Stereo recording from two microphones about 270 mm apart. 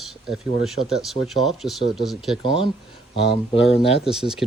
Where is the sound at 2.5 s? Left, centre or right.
Centre.